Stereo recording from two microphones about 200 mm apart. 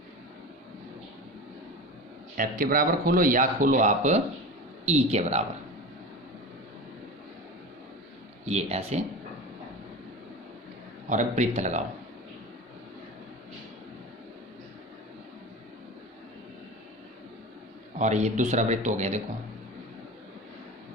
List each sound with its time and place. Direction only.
2.3 s speech: 45° right (ahead or behind)
8.4 s speech: 30° right (ahead or behind)
11.1 s speech: 35° right (ahead or behind)
18.0 s speech: 35° right (ahead or behind)